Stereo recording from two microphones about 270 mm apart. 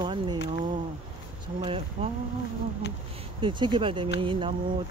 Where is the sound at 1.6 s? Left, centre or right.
Centre.